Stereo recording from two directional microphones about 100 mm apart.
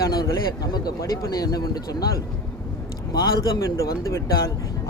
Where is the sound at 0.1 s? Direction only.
40° left (ahead or behind).